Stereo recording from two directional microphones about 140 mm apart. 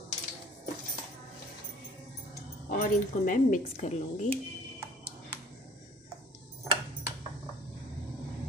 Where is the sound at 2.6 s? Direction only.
75° left (ahead or behind); by 4.2 s 60° left (ahead or behind).